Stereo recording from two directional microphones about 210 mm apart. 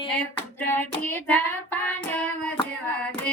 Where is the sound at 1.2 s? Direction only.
10° left (ahead or behind).